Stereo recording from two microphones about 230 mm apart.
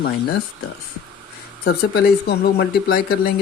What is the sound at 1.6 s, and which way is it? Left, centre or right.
Speech, left.